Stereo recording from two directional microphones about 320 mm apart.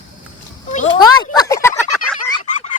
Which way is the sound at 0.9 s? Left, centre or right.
Centre.